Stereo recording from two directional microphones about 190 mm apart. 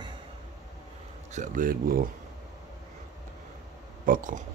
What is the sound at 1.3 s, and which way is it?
Speech, 45° right (ahead or behind).